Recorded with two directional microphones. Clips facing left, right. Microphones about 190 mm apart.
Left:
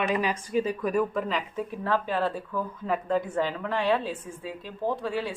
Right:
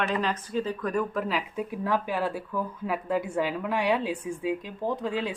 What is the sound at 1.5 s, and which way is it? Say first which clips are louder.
Speech: left 1 dB; 10° right (ahead or behind).